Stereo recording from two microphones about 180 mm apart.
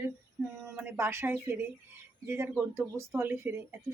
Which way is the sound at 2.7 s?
15° right (ahead or behind).